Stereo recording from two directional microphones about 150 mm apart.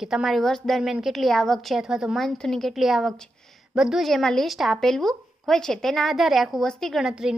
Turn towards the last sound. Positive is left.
turn(degrees=-5)  # may be behind; listen again after turning